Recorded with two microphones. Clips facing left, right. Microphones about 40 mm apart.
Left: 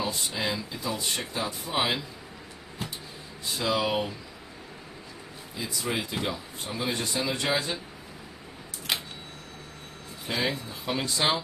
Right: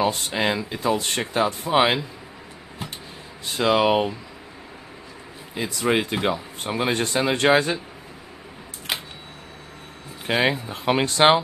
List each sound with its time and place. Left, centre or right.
0.0 s speech: right
3.5 s speech: right
5.5 s speech: right
10.2 s speech: right